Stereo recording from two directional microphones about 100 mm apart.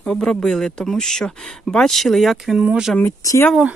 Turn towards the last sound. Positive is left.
turn(degrees=25)  # may be behind; listen again after turning